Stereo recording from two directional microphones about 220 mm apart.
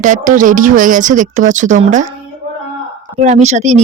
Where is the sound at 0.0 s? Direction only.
35° right (ahead or behind).